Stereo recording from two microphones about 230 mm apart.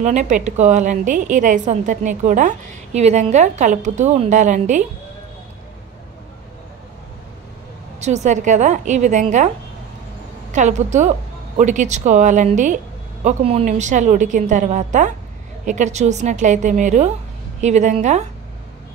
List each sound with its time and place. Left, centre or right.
0.0 s a woman's voice: right
8.0 s a woman's voice: right
10.5 s a woman's voice: right